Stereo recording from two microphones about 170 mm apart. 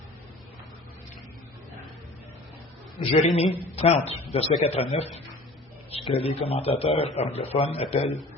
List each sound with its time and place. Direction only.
3.0 s a man's voice: 40° left (ahead or behind)